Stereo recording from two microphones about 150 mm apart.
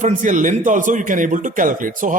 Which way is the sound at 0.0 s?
55° right (ahead or behind).